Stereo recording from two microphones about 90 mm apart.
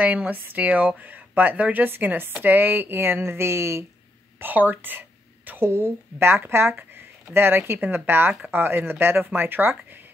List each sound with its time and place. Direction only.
0.0 s speech: 15° right (ahead or behind)